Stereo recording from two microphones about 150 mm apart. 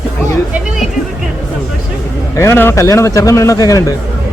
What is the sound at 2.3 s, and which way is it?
Speech, 20° left (ahead or behind).